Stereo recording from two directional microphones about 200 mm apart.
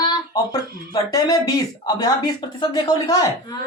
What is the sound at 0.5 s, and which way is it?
Speech, 20° left (ahead or behind).